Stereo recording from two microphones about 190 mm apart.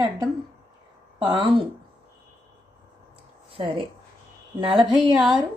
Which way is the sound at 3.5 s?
30° right (ahead or behind).